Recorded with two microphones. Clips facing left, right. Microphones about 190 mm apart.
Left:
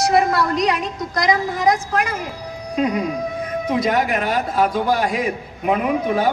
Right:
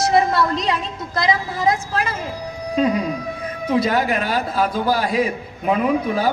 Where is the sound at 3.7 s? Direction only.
30° right (ahead or behind).